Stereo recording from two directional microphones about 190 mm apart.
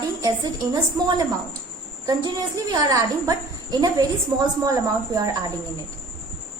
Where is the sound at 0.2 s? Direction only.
20° right (ahead or behind).